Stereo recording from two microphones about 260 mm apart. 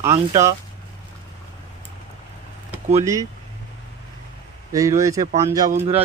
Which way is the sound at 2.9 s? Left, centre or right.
Centre.